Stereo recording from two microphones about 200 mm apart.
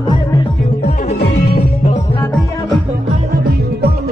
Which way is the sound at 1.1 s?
55° left (ahead or behind).